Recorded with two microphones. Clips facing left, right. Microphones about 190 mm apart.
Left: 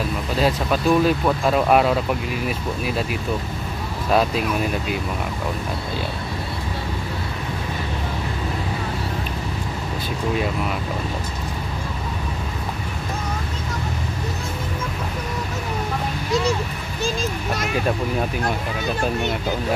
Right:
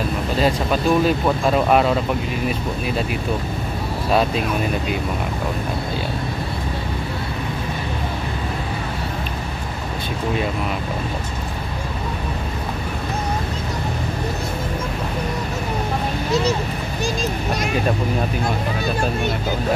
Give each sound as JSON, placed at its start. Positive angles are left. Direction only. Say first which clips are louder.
{"t": 0.4, "sound": "speech", "louder": "right 1 dB", "side_deg": 0}
{"t": 4.1, "sound": "speech", "louder": "even", "side_deg": 0}